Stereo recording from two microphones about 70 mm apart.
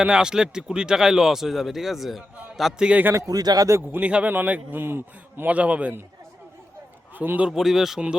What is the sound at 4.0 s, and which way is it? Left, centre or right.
A man's voice, centre.